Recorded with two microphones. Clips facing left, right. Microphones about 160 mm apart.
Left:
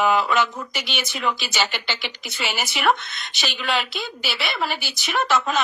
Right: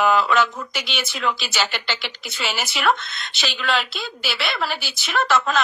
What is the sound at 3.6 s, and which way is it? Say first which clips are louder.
Speech: right 1 dB; 15° left (ahead or behind).